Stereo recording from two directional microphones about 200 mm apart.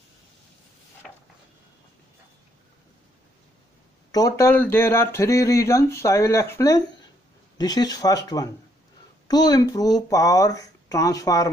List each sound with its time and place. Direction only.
4.1 s speech: 15° left (ahead or behind)